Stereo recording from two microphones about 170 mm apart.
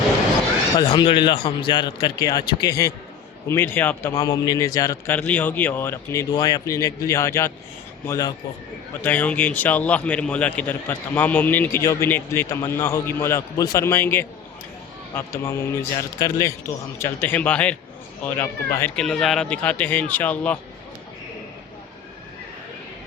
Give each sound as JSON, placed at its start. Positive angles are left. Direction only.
{"t": 0.9, "sound": "a man's voice", "side_deg": 30}